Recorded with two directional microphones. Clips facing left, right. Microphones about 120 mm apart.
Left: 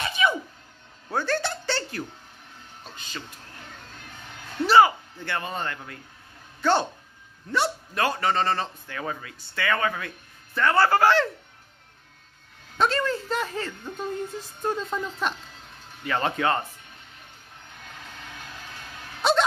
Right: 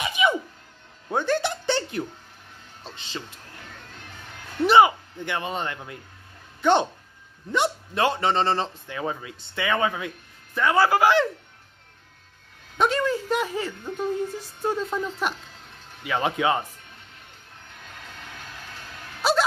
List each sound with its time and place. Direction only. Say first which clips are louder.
0.0 s a sound: right 2 dB; 15° right (ahead or behind)
1.0 s speech: right 3 dB; 15° right (ahead or behind)
4.6 s a man's voice: right 1 dB; 20° right (ahead or behind)
12.7 s speech: right 1 dB; 15° right (ahead or behind)
19.2 s wail: even; 5° right (ahead or behind)